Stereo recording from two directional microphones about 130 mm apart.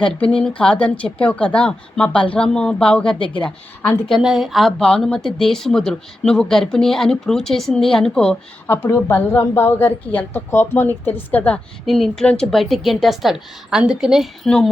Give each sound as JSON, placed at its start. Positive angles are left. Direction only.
{"t": 0.0, "sound": "a woman's voice", "side_deg": 5}
{"t": 3.2, "sound": "speech", "side_deg": 40}
{"t": 3.4, "sound": "a woman's voice", "side_deg": 5}
{"t": 8.6, "sound": "a woman's voice", "side_deg": 15}
{"t": 11.9, "sound": "speech", "side_deg": 0}